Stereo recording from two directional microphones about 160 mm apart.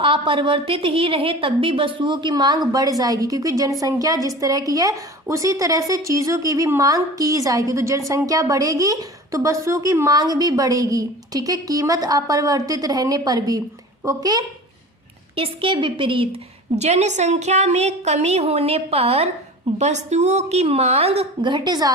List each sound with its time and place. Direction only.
0.0 s a woman's voice: 30° right (ahead or behind)
16.7 s a woman's voice: 45° right (ahead or behind); by 21.9 s 25° right (ahead or behind)